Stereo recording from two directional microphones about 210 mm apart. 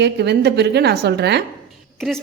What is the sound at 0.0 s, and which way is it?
A woman's voice, 55° right (ahead or behind).